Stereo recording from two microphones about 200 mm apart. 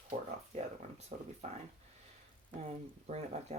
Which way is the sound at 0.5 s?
35° right (ahead or behind).